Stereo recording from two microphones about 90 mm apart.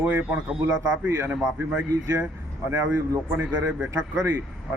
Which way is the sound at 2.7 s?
35° right (ahead or behind).